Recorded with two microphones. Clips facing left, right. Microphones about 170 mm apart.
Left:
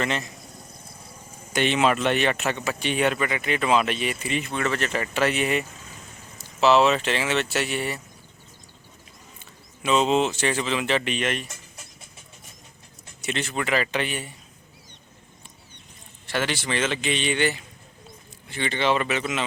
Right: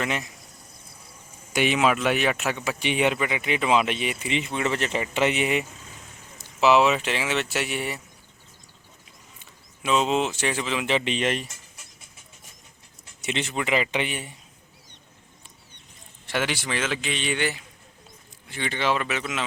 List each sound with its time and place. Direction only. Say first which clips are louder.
0.0 s speech: left 1 dB; 10° right (ahead or behind)
1.5 s speech: even; 10° right (ahead or behind)
9.4 s speech: left 2 dB; 5° right (ahead or behind)
11.1 s speech: right 1 dB; 30° right (ahead or behind)
13.2 s speech: even; 20° right (ahead or behind)
16.2 s speech: left 1 dB; 15° right (ahead or behind)